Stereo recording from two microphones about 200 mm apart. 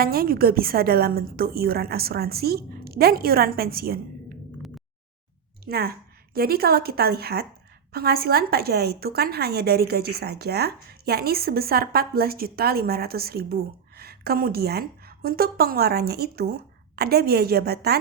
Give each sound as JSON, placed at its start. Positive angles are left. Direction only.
{"t": 0.0, "sound": "a woman's voice", "side_deg": -50}
{"t": 5.6, "sound": "a woman's voice", "side_deg": -50}